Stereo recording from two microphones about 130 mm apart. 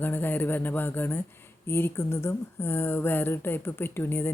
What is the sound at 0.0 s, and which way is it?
Speech, 15° left (ahead or behind).